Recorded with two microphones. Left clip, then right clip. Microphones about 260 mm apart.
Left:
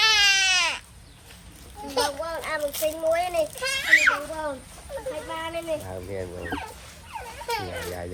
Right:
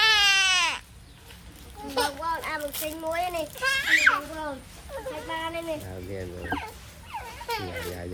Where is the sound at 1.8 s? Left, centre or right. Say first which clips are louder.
Left 1 dB; centre.